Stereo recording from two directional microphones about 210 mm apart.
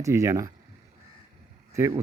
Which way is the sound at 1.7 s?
15° right (ahead or behind).